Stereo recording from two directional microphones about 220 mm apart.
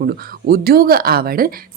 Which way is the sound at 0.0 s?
45° right (ahead or behind).